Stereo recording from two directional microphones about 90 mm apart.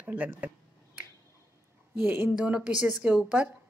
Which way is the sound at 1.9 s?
20° right (ahead or behind).